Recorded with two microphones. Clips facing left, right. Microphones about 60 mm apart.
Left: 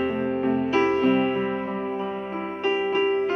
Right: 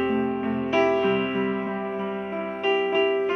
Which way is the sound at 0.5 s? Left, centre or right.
Right.